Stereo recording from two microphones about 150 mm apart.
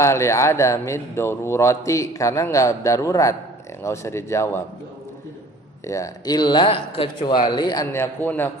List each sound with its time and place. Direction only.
0.0 s a man's voice: 20° left (ahead or behind)
5.8 s a man's voice: 20° left (ahead or behind)
7.9 s a man's voice: 15° left (ahead or behind)